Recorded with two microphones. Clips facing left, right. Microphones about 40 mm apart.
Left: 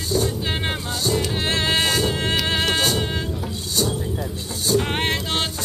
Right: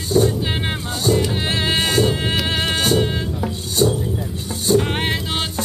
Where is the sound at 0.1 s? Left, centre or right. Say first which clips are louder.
Right 7 dB; right.